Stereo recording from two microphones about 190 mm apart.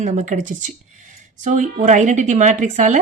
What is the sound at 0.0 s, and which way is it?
A woman's voice, 40° right (ahead or behind).